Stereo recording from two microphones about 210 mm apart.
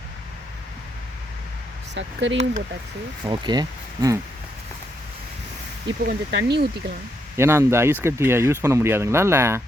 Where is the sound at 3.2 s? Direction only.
20° right (ahead or behind).